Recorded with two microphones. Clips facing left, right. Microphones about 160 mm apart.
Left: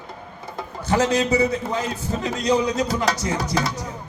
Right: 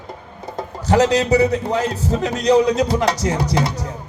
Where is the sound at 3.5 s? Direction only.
25° right (ahead or behind).